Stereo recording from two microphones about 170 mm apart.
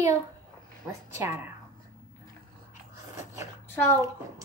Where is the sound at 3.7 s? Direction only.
15° left (ahead or behind).